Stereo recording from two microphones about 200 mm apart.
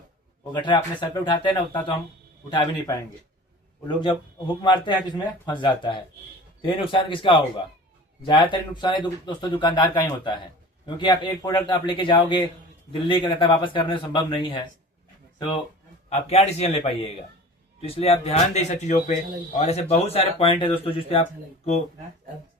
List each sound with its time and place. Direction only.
0.5 s speech: 25° left (ahead or behind)
16.0 s speech: 30° left (ahead or behind)
17.8 s speech: 30° left (ahead or behind)